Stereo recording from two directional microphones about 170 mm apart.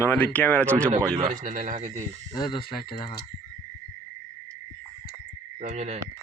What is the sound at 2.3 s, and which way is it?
Speech, 25° left (ahead or behind).